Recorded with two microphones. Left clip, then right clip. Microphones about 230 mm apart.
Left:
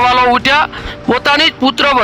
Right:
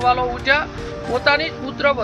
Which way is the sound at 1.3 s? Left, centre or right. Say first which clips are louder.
Left 8 dB; left.